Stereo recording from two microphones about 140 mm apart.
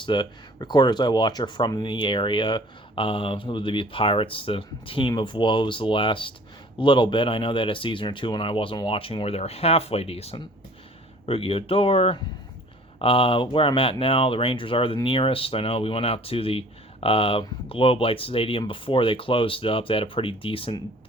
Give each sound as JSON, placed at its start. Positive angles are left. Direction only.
{"t": 0.0, "sound": "speech", "side_deg": 35}